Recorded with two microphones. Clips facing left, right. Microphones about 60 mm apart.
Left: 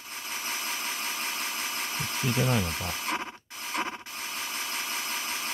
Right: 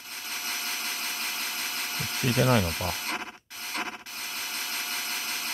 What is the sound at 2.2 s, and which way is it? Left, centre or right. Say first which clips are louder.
Speech: right 4 dB; right.